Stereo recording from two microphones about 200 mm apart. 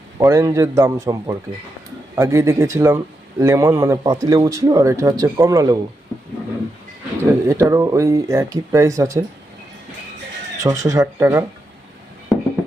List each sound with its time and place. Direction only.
0.2 s speech: 15° right (ahead or behind)
7.2 s speech: 15° right (ahead or behind)
10.6 s speech: 15° right (ahead or behind)